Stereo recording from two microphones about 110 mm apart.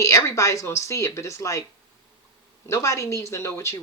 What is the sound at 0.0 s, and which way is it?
Speech, 30° left (ahead or behind).